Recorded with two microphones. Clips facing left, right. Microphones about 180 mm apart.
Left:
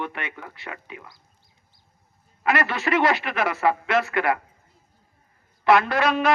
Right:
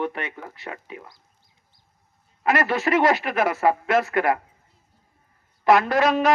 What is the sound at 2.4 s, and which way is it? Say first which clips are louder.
Speech: right 2 dB; 40° right (ahead or behind).